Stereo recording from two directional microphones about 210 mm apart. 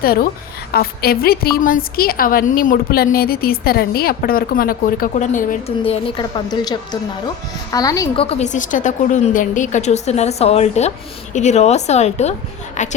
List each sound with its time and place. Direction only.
0.0 s a woman's voice: 45° left (ahead or behind)
5.8 s a woman's voice: 25° left (ahead or behind)